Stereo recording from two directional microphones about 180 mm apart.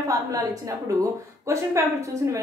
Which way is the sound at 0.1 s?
20° right (ahead or behind).